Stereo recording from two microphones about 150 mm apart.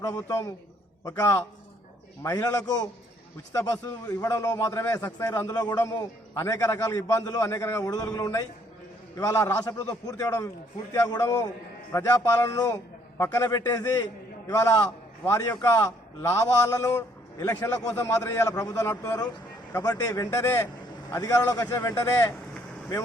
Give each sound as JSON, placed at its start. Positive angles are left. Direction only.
{"t": 0.0, "sound": "a man's voice", "side_deg": 20}